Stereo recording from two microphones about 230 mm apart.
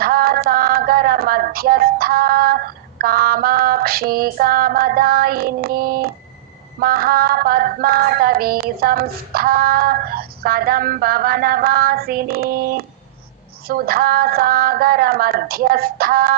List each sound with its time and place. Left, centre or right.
0.0 s music: right